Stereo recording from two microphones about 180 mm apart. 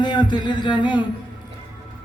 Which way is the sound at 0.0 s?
25° left (ahead or behind).